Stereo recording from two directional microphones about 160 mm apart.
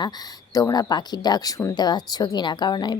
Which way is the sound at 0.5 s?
25° left (ahead or behind).